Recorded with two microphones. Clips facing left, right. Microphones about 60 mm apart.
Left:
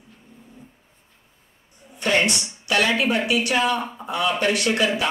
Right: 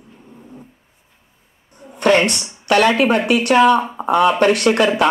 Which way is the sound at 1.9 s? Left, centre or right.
Right.